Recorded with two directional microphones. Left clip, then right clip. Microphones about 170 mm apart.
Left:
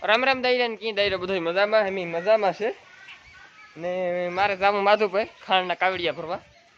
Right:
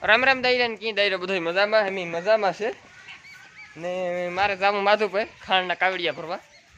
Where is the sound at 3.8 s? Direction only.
5° left (ahead or behind).